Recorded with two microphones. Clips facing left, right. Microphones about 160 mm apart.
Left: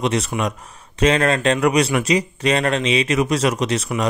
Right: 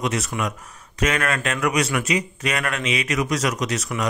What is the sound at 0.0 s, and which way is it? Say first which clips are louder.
Speech: left 4 dB; 30° left (ahead or behind).